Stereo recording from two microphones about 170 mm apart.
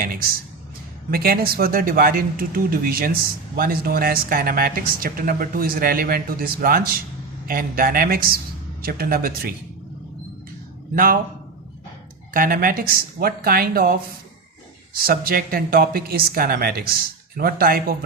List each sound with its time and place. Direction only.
1.1 s speech: 65° right (ahead or behind)
10.9 s speech: 55° right (ahead or behind)
12.3 s speech: 55° right (ahead or behind)
15.0 s speech: 60° right (ahead or behind)